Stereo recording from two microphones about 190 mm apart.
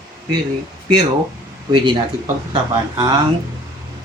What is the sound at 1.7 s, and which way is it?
Speech, 25° right (ahead or behind).